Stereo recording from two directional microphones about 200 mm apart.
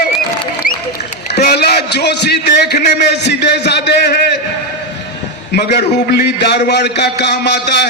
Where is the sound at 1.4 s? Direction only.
50° left (ahead or behind).